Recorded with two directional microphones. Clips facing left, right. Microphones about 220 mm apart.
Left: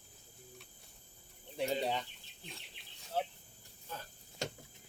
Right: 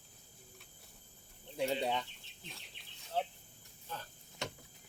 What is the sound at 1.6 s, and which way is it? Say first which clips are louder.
Speech: even; centre (ahead or behind).